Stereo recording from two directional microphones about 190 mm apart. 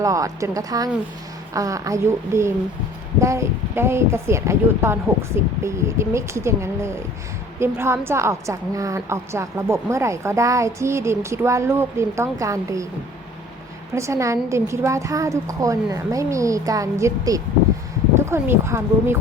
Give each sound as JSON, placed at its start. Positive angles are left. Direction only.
{"t": 0.0, "sound": "a woman's voice", "side_deg": -15}
{"t": 13.9, "sound": "a woman's voice", "side_deg": -15}